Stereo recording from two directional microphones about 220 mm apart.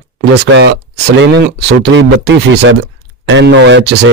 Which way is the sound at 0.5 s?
55° right (ahead or behind).